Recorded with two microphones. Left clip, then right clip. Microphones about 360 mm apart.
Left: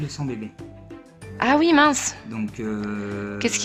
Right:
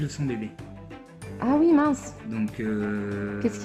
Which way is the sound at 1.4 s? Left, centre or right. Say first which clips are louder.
Left 5 dB; left.